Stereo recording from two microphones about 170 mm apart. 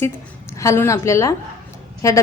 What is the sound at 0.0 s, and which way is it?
A woman's voice, 15° left (ahead or behind).